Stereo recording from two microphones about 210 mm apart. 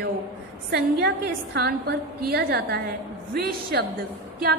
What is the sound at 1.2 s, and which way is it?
A woman's voice, 45° right (ahead or behind).